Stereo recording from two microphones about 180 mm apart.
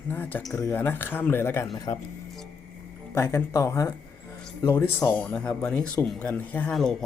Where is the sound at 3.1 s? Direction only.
15° left (ahead or behind).